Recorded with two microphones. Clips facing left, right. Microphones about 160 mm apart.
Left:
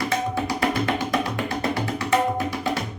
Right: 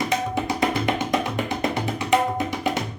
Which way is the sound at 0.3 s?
20° right (ahead or behind).